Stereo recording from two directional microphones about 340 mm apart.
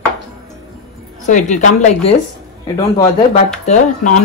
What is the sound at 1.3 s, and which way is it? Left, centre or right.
Speech, left.